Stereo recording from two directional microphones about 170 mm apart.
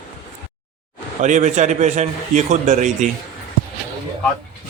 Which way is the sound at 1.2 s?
45° right (ahead or behind).